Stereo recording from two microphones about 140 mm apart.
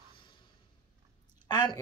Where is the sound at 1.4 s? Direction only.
30° left (ahead or behind).